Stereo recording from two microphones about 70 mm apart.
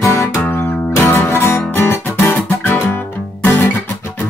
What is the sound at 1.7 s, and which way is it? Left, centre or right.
Guitar, left.